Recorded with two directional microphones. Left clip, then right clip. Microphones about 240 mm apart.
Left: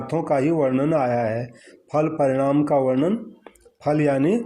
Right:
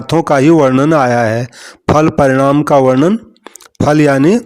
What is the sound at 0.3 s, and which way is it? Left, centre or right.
Speech, right.